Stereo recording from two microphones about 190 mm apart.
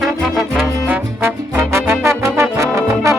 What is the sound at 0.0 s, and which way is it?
Music, centre (ahead or behind).